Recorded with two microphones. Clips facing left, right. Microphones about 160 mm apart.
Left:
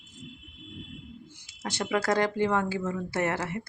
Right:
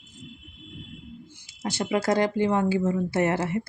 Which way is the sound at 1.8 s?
15° right (ahead or behind).